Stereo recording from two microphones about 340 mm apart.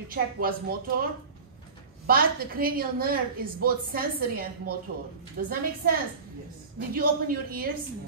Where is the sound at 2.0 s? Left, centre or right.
Right.